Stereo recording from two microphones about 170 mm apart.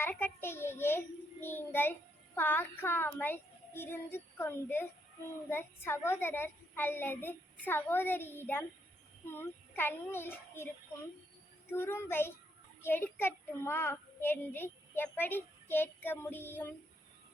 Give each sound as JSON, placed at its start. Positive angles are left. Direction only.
{"t": 0.0, "sound": "a child's voice", "side_deg": 10}
{"t": 11.7, "sound": "a child's voice", "side_deg": 15}